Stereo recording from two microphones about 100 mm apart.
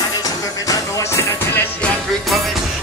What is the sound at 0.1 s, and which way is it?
Music, 35° left (ahead or behind).